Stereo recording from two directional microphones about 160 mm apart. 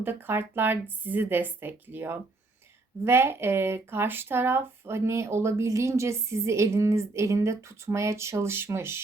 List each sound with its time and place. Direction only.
0.0 s speech: 15° right (ahead or behind)